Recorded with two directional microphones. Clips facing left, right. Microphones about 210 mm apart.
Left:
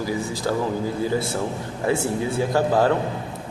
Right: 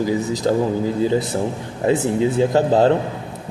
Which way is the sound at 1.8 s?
20° right (ahead or behind).